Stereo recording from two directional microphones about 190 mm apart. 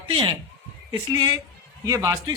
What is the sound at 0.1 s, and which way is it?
A woman's voice, 25° right (ahead or behind).